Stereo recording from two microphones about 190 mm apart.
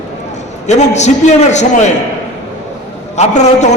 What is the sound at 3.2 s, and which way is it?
Speech, 35° left (ahead or behind).